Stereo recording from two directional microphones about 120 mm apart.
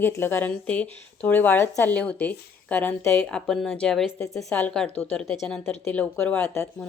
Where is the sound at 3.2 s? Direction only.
5° left (ahead or behind).